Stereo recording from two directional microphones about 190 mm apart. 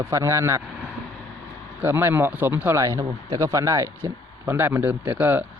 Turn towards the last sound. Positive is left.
turn(degrees=-10)  # may be behind; listen again after turning